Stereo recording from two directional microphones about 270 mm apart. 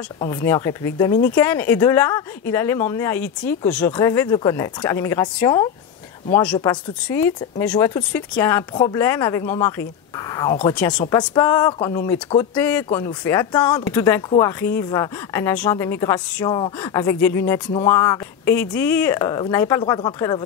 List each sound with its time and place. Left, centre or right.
0.2 s speech: centre
10.8 s speech: centre